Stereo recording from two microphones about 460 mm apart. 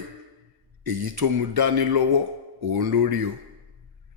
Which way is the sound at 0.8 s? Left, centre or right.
Right.